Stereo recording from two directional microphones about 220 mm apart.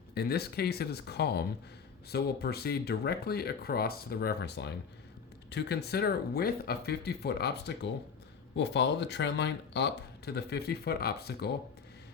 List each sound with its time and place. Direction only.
0.1 s speech: 45° left (ahead or behind)